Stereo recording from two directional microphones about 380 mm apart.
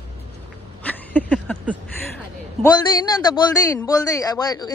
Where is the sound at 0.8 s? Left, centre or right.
Centre.